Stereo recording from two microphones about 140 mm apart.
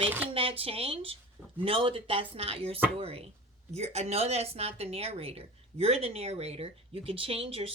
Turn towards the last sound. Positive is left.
turn(degrees=-40)  # may be behind; listen again after turning